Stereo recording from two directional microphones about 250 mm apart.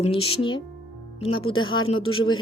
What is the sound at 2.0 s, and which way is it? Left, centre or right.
Speech, centre.